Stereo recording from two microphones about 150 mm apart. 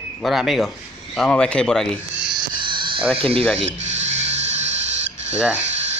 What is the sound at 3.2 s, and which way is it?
Speech, 40° right (ahead or behind).